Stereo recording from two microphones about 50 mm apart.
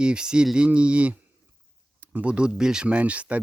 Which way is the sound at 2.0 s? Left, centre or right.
Right.